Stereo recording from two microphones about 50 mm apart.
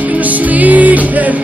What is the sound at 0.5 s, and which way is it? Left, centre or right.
Music, right.